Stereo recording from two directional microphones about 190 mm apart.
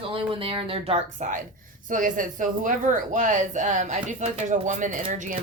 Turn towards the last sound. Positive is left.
turn(degrees=-45)  # may be behind; listen again after turning